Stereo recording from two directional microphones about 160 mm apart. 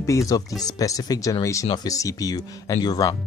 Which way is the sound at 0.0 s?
20° left (ahead or behind).